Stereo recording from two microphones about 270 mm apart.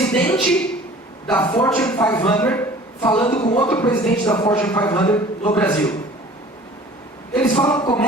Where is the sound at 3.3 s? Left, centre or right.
Left.